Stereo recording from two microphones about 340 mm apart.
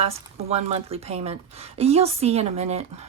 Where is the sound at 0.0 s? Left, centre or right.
Centre.